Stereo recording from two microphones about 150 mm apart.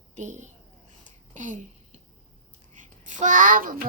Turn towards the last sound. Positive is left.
turn(degrees=-65)  # may be behind; listen again after turning